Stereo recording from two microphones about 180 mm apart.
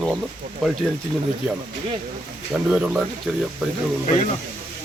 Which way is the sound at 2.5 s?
5° right (ahead or behind).